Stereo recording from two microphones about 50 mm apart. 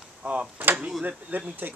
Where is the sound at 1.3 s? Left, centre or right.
Right.